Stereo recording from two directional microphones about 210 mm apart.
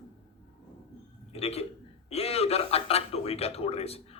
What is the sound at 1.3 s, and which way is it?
Speech, 30° left (ahead or behind).